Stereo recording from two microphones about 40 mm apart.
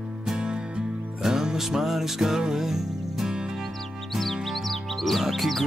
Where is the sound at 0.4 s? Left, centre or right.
Right.